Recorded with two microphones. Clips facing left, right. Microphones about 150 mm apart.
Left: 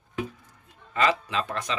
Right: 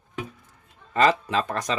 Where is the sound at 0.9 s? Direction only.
40° right (ahead or behind).